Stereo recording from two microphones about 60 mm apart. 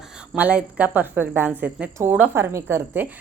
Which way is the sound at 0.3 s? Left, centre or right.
Right.